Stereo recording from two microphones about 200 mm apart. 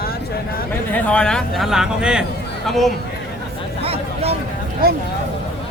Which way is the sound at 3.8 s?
30° right (ahead or behind).